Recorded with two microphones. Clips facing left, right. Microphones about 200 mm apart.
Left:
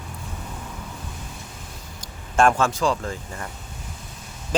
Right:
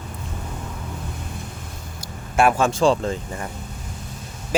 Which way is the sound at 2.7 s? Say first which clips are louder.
Right 5 dB; 25° right (ahead or behind).